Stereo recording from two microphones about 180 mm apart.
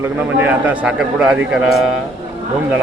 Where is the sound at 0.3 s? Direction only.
10° right (ahead or behind).